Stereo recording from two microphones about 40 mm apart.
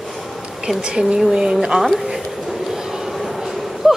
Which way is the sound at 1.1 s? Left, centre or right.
Centre.